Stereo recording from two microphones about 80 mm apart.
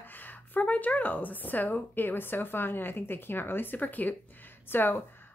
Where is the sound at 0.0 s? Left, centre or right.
Left.